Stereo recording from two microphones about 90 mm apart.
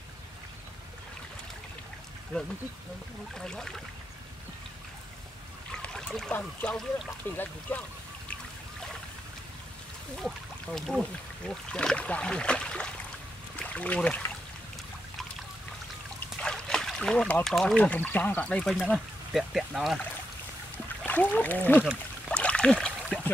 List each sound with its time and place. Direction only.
3.3 s speech: 5° left (ahead or behind)
5.7 s a sound: 10° left (ahead or behind)
6.3 s speech: 15° left (ahead or behind)
10.1 s speech: 5° left (ahead or behind)
16.3 s a sound: 10° left (ahead or behind)
17.7 s speech: 15° left (ahead or behind)
19.3 s speech: 5° right (ahead or behind)
21.0 s speech: 20° left (ahead or behind)
22.3 s a sound: 10° left (ahead or behind)